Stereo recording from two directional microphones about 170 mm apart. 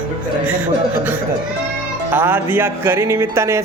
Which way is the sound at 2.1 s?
10° right (ahead or behind).